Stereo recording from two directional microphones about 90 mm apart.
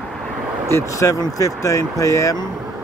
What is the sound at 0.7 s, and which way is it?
Speech, 35° left (ahead or behind).